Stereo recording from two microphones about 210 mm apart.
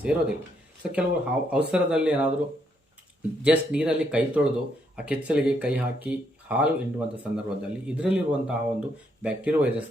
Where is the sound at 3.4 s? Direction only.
5° right (ahead or behind).